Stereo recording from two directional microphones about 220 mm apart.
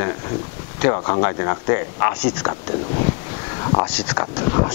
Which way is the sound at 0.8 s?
20° left (ahead or behind).